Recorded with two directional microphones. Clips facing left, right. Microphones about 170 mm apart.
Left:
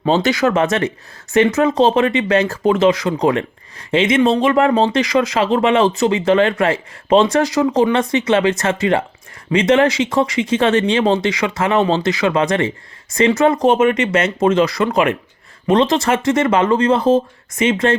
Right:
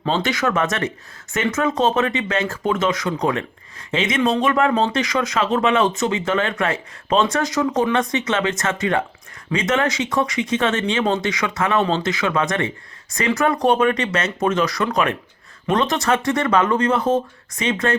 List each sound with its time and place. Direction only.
0.0 s speech: 35° left (ahead or behind)